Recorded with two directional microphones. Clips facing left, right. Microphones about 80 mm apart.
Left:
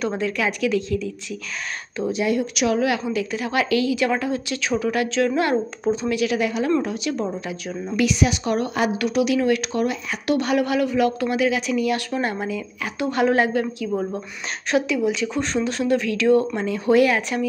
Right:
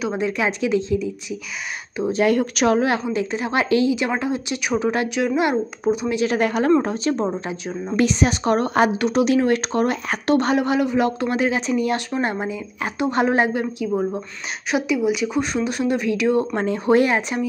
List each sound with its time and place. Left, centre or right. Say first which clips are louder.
0.2 s a woman's voice: right 1 dB; right
2.1 s a woman's voice: right 5 dB; right
5.1 s speech: left 2 dB; centre
6.1 s speech: right 2 dB; right
10.3 s a woman's voice: right 2 dB; right
16.5 s a woman's voice: right 1 dB; right